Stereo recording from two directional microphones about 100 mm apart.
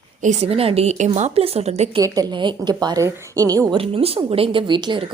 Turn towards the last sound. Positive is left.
turn(degrees=-50)  # may be behind; listen again after turning